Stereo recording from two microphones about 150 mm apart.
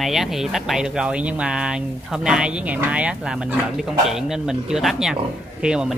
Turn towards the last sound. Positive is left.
turn(degrees=-5)  # may be behind; listen again after turning